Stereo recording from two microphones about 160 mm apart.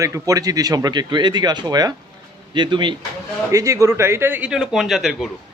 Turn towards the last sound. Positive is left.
turn(degrees=0)  # may be behind; listen again after turning